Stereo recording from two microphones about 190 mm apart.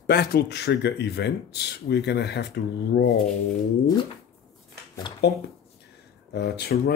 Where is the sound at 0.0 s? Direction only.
55° left (ahead or behind).